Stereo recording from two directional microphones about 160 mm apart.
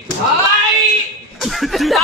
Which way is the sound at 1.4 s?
Centre (ahead or behind).